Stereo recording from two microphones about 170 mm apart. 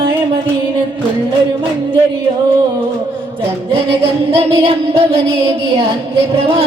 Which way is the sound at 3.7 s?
30° right (ahead or behind).